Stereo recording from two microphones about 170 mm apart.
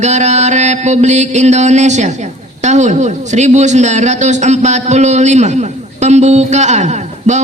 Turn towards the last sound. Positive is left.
turn(degrees=-45)  # may be behind; listen again after turning